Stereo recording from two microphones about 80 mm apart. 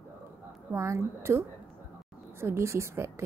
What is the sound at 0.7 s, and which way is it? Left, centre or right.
A woman's voice, right.